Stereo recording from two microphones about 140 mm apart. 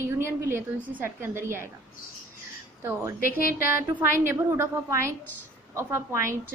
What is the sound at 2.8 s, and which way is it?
Speech, 15° right (ahead or behind).